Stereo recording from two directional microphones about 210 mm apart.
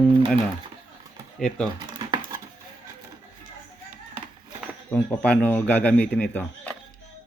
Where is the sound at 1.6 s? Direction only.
20° right (ahead or behind).